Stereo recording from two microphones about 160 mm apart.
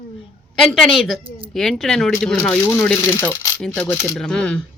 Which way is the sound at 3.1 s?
15° left (ahead or behind).